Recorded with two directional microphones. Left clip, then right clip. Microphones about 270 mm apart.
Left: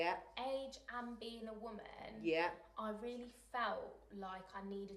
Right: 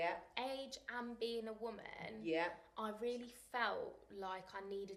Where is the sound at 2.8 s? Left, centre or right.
Right.